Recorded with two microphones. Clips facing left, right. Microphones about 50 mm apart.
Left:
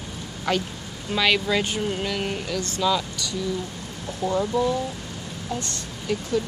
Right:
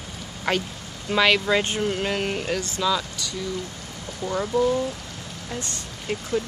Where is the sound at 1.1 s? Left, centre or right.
Right.